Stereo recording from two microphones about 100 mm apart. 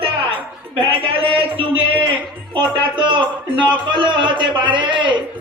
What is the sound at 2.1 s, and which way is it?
A man's voice, 60° right (ahead or behind).